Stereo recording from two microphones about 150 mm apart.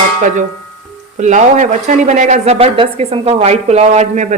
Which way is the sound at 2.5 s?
40° right (ahead or behind).